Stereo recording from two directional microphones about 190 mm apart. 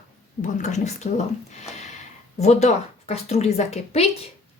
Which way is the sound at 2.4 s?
35° left (ahead or behind).